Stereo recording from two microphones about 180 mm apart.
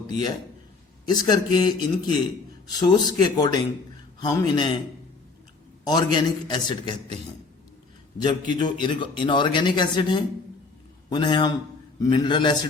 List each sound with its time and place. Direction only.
1.0 s speech: 25° left (ahead or behind)
5.8 s speech: 25° left (ahead or behind)
8.2 s speech: 25° left (ahead or behind)